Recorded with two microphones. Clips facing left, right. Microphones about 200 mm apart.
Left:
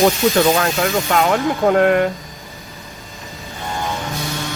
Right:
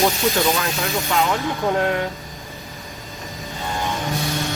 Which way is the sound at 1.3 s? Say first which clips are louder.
Left 6 dB; 60° left (ahead or behind).